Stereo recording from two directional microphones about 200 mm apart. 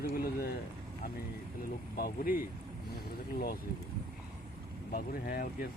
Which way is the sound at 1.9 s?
45° left (ahead or behind).